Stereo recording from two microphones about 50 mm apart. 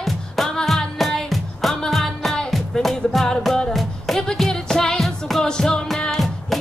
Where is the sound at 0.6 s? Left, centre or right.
Centre.